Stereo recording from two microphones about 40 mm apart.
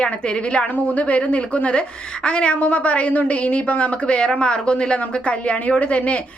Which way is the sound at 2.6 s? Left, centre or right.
Left.